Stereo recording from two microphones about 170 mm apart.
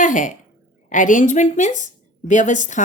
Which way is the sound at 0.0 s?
50° left (ahead or behind).